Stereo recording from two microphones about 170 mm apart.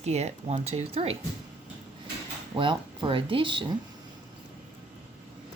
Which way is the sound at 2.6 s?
30° right (ahead or behind).